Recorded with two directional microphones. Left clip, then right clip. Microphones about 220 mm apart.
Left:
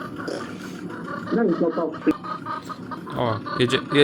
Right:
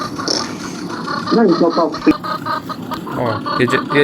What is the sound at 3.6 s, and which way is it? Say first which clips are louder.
Speech: right 6 dB; 60° left (ahead or behind).